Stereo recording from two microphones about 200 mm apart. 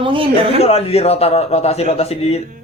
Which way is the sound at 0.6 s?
30° left (ahead or behind).